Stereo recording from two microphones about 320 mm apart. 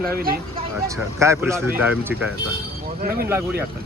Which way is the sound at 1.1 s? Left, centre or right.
Centre.